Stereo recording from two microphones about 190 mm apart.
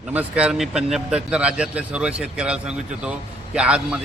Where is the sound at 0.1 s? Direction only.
5° right (ahead or behind).